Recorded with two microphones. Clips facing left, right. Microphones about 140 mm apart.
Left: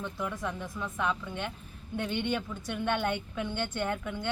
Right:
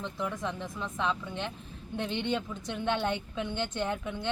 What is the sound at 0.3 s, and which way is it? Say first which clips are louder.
Speech: right 1 dB; 20° right (ahead or behind).